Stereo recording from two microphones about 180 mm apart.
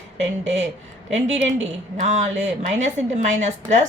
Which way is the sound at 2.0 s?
40° right (ahead or behind).